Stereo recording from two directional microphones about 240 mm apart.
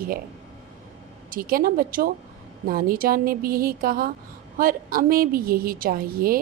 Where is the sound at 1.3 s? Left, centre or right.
Right.